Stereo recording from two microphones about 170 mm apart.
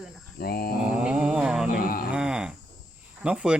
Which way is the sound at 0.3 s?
65° left (ahead or behind).